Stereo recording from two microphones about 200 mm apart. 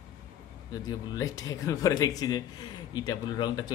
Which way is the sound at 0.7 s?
20° left (ahead or behind).